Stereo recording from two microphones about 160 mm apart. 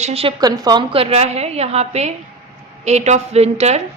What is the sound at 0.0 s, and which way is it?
Speech, 40° right (ahead or behind).